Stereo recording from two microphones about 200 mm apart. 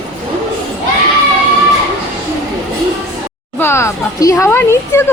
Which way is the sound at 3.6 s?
15° left (ahead or behind).